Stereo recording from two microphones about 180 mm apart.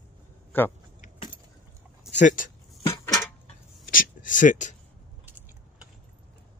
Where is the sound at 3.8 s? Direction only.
50° left (ahead or behind).